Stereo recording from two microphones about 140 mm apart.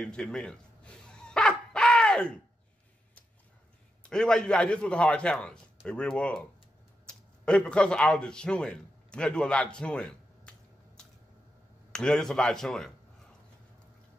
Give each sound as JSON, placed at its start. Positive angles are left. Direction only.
{"t": 0.0, "sound": "dog", "side_deg": 5}
{"t": 4.0, "sound": "a man's voice", "side_deg": 5}
{"t": 11.9, "sound": "speech", "side_deg": 5}